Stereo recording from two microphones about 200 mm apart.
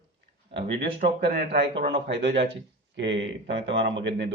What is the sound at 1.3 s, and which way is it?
Speech, 55° right (ahead or behind).